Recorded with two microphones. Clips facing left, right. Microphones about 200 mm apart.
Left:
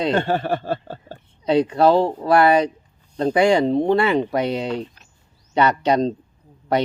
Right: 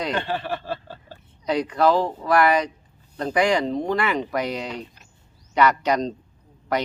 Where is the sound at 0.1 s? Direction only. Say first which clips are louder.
Left 6 dB; 45° left (ahead or behind).